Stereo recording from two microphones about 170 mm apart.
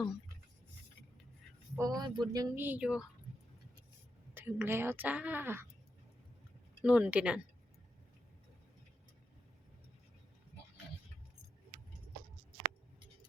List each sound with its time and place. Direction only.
1.7 s speech: 20° right (ahead or behind)
2.6 s a woman's voice: 10° right (ahead or behind)
4.4 s a woman's voice: 10° right (ahead or behind)
6.8 s a woman's voice: 10° right (ahead or behind)